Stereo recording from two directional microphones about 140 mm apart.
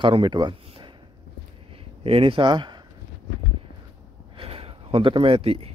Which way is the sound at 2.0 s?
40° right (ahead or behind).